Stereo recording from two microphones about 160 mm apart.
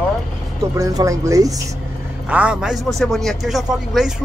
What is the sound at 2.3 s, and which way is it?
Speech, 10° right (ahead or behind).